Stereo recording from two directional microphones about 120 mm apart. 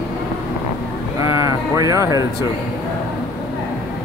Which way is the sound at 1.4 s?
25° right (ahead or behind).